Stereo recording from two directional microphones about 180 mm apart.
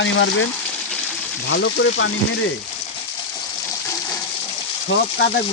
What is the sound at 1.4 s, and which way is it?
Speech, 80° left.